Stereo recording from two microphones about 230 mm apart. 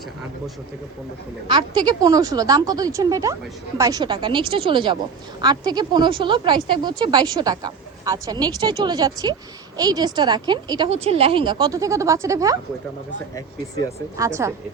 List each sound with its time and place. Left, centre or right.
1.5 s a woman's voice: centre
14.2 s a woman's voice: centre